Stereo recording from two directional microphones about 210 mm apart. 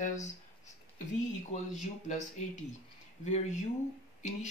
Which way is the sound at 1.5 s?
35° left (ahead or behind).